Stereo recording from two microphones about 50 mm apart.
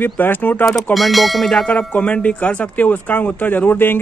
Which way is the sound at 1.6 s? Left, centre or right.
Left.